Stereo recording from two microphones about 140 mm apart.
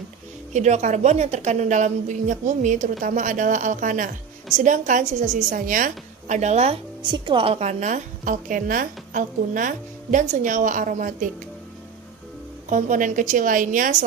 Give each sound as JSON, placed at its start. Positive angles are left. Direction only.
{"t": 0.5, "sound": "a woman's voice", "side_deg": -55}
{"t": 7.1, "sound": "a woman's voice", "side_deg": -35}
{"t": 12.6, "sound": "a woman's voice", "side_deg": -65}